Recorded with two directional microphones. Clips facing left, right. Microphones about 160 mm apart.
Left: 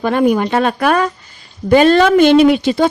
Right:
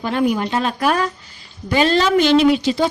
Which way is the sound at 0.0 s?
55° left (ahead or behind).